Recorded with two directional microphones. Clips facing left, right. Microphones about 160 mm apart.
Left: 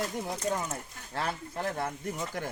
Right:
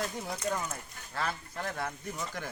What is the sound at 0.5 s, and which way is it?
Speech, 25° left (ahead or behind).